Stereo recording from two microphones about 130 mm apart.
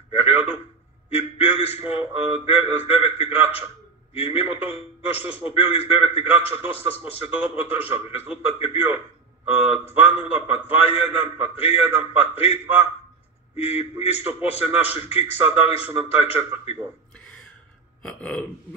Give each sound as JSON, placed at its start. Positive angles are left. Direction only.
{"t": 0.2, "sound": "a sound", "side_deg": 50}
{"t": 1.6, "sound": "a man's voice", "side_deg": 50}
{"t": 10.0, "sound": "a man's voice", "side_deg": 50}
{"t": 18.0, "sound": "burping", "side_deg": 10}